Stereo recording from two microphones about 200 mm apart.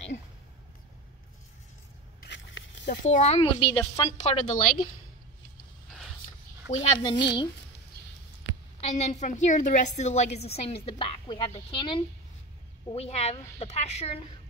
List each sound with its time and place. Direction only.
2.2 s a sound: 65° left (ahead or behind)
3.0 s speech: 35° left (ahead or behind)
4.2 s a woman's voice: 40° left (ahead or behind)
6.7 s speech: 30° left (ahead or behind)
8.8 s a woman's voice: 35° left (ahead or behind)